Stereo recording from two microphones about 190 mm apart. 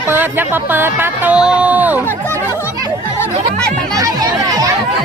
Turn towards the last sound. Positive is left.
turn(degrees=-20)  # may be behind; listen again after turning